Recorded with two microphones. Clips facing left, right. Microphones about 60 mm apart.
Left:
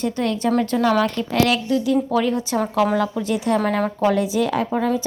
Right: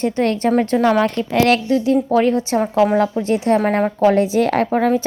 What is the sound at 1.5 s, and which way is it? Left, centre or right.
A woman's voice, right.